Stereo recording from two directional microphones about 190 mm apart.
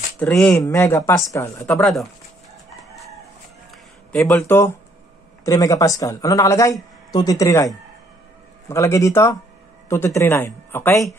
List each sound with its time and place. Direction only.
0.2 s speech: 5° left (ahead or behind)
1.7 s speech: centre (ahead or behind)
3.7 s speech: 5° left (ahead or behind)